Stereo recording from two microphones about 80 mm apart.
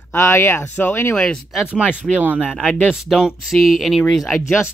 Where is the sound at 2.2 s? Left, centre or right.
Right.